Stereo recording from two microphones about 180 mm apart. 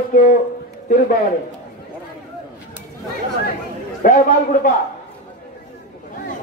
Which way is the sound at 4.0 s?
45° left (ahead or behind).